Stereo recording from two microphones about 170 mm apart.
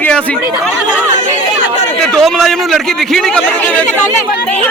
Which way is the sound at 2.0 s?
Centre (ahead or behind).